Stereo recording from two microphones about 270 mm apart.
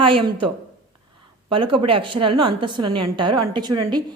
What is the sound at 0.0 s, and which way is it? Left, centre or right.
A woman's voice, centre.